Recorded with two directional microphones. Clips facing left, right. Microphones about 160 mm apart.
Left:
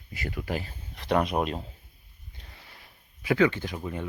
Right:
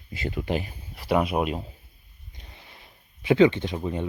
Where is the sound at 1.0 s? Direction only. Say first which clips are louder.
Right 2 dB; 5° right (ahead or behind).